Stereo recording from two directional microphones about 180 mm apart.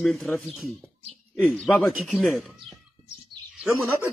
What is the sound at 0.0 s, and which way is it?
Speech, centre (ahead or behind).